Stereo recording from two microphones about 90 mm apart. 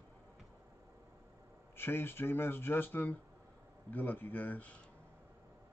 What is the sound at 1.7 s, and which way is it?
Speech, 25° left (ahead or behind).